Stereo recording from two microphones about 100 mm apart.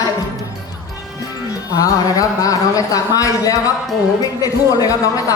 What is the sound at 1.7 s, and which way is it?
Speech, 35° left (ahead or behind).